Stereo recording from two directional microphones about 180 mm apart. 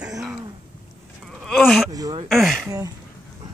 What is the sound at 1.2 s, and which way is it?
Gasp, centre (ahead or behind).